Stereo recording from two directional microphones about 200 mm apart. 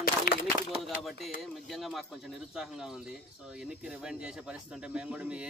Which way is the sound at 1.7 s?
Centre (ahead or behind).